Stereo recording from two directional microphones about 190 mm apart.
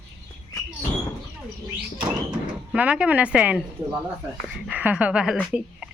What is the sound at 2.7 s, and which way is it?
Speech, 5° right (ahead or behind).